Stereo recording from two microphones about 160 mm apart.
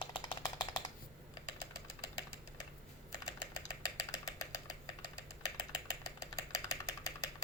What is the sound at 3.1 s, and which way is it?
Typing, 25° left (ahead or behind).